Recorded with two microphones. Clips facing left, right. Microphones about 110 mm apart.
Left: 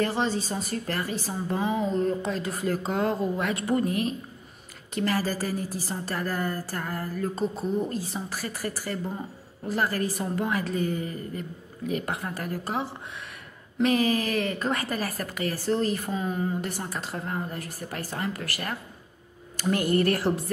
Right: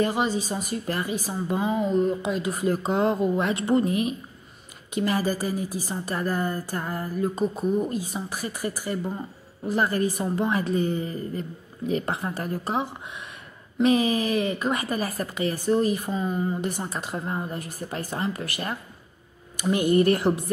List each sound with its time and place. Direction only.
0.0 s a woman's voice: 15° right (ahead or behind)
16.1 s speech: centre (ahead or behind)
16.6 s a woman's voice: 20° right (ahead or behind)